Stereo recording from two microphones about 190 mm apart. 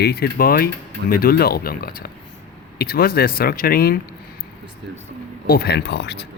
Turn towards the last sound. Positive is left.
turn(degrees=60)  # may be behind; listen again after turning